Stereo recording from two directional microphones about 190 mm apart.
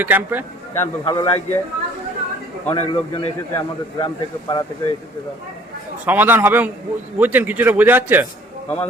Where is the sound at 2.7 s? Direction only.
25° left (ahead or behind).